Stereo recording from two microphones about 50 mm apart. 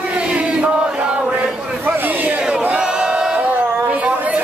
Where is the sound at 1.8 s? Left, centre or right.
Right.